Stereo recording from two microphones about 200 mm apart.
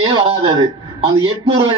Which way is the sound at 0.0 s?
25° right (ahead or behind).